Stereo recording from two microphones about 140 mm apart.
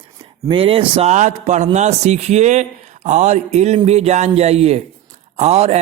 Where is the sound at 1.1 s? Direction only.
60° right (ahead or behind).